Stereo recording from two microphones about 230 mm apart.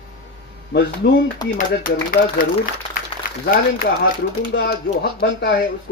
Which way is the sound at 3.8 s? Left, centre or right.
Left.